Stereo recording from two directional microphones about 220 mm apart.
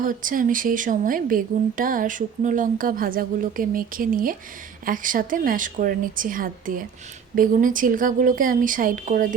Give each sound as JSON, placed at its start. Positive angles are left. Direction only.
{"t": 0.0, "sound": "speech", "side_deg": -40}